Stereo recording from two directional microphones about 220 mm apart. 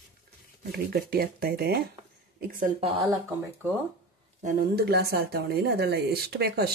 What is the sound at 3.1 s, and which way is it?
Speech, 10° right (ahead or behind).